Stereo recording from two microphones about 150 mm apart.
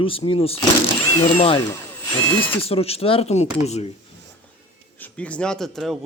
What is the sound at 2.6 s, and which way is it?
Speech, 40° left (ahead or behind).